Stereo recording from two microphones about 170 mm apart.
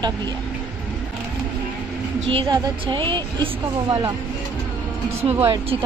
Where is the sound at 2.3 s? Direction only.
30° right (ahead or behind).